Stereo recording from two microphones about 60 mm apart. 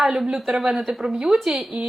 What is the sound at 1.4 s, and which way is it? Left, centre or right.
Speech, centre.